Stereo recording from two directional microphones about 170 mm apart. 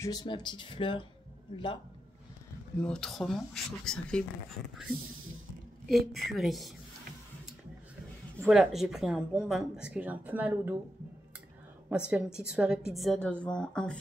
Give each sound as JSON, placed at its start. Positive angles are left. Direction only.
{"t": 0.0, "sound": "speech", "side_deg": 25}
{"t": 2.8, "sound": "speech", "side_deg": 5}
{"t": 8.4, "sound": "speech", "side_deg": -5}
{"t": 12.1, "sound": "speech", "side_deg": -5}